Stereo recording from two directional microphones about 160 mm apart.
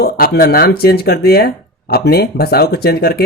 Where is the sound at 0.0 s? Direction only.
75° left (ahead or behind).